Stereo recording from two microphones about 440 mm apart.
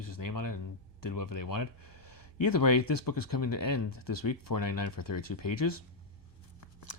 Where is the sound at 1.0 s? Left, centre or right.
Left.